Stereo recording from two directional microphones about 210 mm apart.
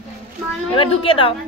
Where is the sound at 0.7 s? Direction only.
25° left (ahead or behind).